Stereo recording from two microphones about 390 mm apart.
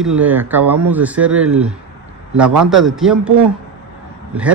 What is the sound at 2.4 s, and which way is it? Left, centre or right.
Speech, right.